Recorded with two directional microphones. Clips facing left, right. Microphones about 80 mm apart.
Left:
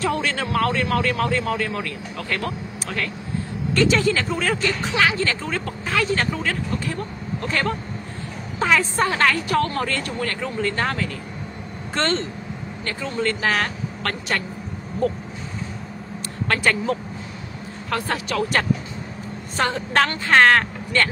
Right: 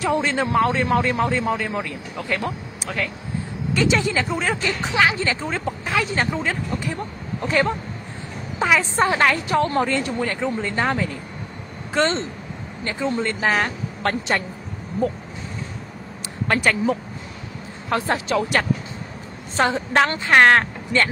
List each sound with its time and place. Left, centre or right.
0.0 s a man's voice: centre
3.7 s a man's voice: centre
16.4 s a man's voice: centre
17.8 s a woman's voice: right